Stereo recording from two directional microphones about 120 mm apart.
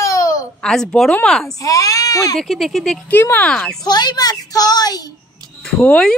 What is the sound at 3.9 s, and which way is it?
A woman's voice, 35° left (ahead or behind).